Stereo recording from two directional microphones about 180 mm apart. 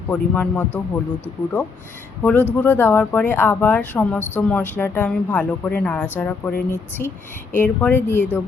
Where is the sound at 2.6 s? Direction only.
10° left (ahead or behind).